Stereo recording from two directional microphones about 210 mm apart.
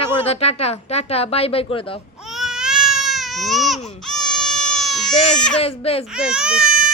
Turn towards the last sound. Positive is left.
turn(degrees=-5)  # may be behind; listen again after turning